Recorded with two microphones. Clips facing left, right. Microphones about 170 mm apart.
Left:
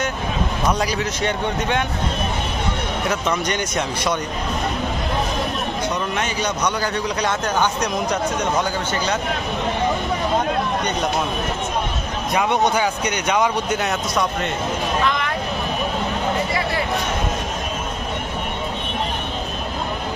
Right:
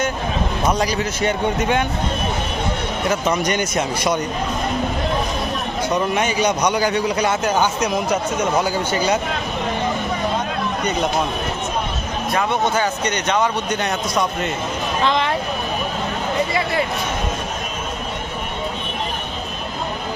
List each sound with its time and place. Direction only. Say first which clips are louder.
0.8 s speech: right 2 dB; centre (ahead or behind)
3.1 s a man's voice: right 4 dB; 5° right (ahead or behind)
6.1 s a man's voice: right 4 dB; 10° right (ahead or behind)
12.3 s speech: left 1 dB; 15° left (ahead or behind)
15.0 s a sound: right 3 dB; 30° right (ahead or behind)